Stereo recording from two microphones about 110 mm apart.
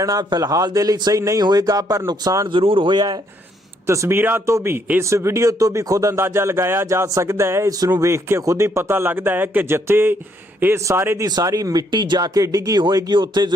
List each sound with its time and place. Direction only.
0.0 s a man's voice: 35° right (ahead or behind)
2.5 s speech: 55° right (ahead or behind)
3.8 s a man's voice: 25° right (ahead or behind); by 13.5 s 40° right (ahead or behind)